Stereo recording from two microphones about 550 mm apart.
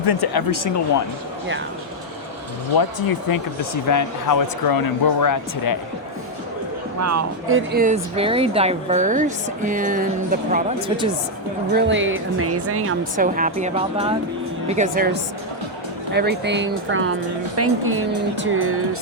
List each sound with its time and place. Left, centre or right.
0.0 s speech: left
2.6 s speech: left
7.0 s speech: right